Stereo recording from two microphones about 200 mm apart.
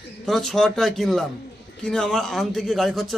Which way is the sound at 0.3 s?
Centre (ahead or behind).